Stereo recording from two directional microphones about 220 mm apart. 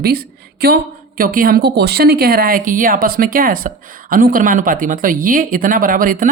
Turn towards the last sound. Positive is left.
turn(degrees=-40)  # may be behind; listen again after turning